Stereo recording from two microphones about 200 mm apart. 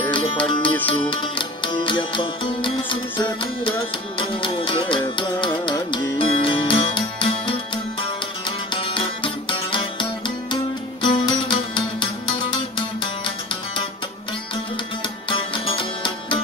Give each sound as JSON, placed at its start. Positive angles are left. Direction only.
{"t": 0.1, "sound": "music", "side_deg": 25}
{"t": 15.2, "sound": "music", "side_deg": 25}